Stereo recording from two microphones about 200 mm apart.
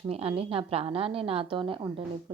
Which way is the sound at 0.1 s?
30° right (ahead or behind).